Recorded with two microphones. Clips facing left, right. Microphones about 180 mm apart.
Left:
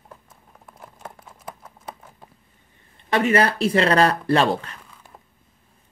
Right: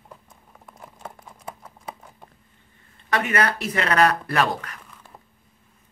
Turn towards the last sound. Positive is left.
turn(degrees=30)  # may be behind; listen again after turning